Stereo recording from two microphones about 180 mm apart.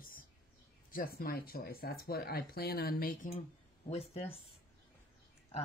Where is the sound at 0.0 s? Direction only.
50° left (ahead or behind).